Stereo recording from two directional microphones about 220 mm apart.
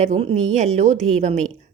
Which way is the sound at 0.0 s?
30° right (ahead or behind).